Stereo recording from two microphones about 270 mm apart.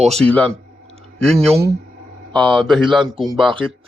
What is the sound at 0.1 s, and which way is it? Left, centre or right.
Speech, centre.